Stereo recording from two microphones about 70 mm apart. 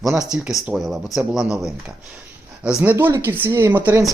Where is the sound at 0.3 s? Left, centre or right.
Centre.